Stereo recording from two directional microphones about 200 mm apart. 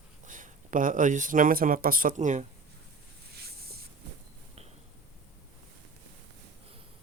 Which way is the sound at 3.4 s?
50° right (ahead or behind).